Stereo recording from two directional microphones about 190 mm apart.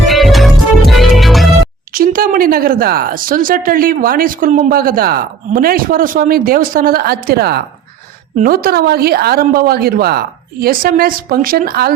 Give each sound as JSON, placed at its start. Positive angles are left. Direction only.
{"t": 0.1, "sound": "music", "side_deg": 0}
{"t": 1.9, "sound": "a woman's voice", "side_deg": -50}